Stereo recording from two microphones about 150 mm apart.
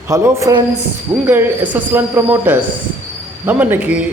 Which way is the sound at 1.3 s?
10° right (ahead or behind).